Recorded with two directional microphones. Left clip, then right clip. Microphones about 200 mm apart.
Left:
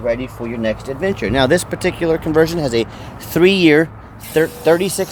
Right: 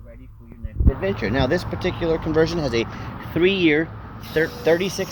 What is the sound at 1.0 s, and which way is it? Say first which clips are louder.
Speech: left 5 dB; 50° left (ahead or behind).